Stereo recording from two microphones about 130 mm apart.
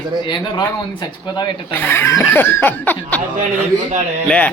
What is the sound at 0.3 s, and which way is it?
Speech, 35° left (ahead or behind).